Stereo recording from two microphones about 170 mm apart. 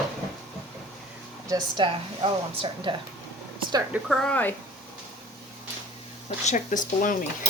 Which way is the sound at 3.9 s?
Centre (ahead or behind).